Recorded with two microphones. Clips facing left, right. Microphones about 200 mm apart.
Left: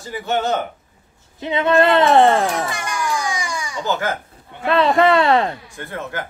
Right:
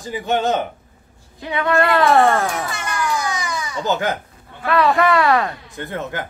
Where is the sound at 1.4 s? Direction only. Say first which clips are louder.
Left 3 dB; 20° left (ahead or behind).